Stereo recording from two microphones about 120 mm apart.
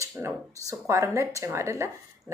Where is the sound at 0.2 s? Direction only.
25° right (ahead or behind).